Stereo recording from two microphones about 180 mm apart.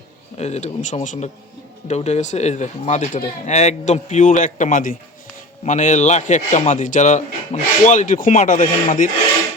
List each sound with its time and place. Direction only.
0.3 s a man's voice: 35° left (ahead or behind)